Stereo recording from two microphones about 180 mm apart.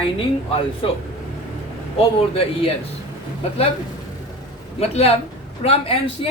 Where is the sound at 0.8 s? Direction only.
30° left (ahead or behind).